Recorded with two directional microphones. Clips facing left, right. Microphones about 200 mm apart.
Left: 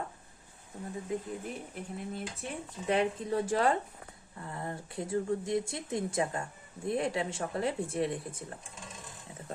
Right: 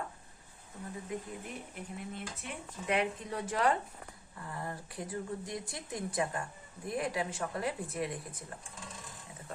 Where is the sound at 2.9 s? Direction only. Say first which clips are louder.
Left 4 dB; 30° left (ahead or behind).